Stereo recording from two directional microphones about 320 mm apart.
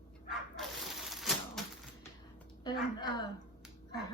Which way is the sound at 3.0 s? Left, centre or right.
Centre.